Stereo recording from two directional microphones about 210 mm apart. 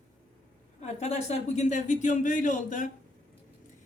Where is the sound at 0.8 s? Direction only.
30° left (ahead or behind).